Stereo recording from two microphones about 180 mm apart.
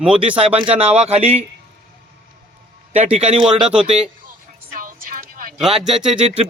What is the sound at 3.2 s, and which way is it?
Speech, 30° right (ahead or behind).